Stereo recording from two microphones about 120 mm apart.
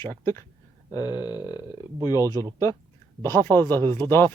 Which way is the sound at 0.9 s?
35° left (ahead or behind).